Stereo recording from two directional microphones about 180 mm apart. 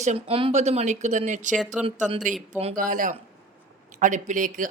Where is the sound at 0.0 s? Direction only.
35° right (ahead or behind).